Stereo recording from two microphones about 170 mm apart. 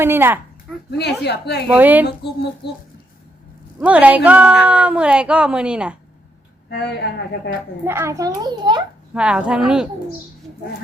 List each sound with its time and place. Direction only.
0.0 s speech: 15° right (ahead or behind)
0.9 s speech: 75° left (ahead or behind)
1.7 s speech: 10° right (ahead or behind)
3.8 s speech: 5° right (ahead or behind)
6.7 s speech: 75° left (ahead or behind)
7.9 s a child's voice: 15° right (ahead or behind)
9.1 s speech: 5° right (ahead or behind)